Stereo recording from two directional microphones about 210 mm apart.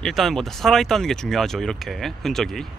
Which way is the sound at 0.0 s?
Centre (ahead or behind).